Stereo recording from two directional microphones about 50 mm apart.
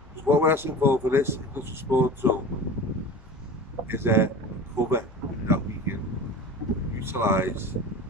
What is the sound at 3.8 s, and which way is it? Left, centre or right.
Speech, right.